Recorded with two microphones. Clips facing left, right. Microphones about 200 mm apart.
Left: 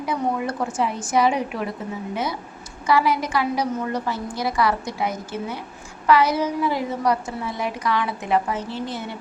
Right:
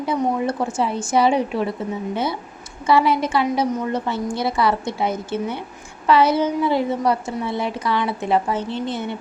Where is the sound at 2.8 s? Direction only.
25° right (ahead or behind).